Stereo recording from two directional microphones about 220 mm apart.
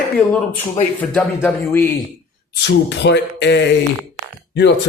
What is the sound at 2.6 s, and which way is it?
Speech, 50° left (ahead or behind).